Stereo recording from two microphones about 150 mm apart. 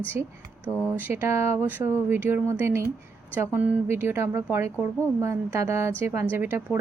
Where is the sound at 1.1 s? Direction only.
15° right (ahead or behind).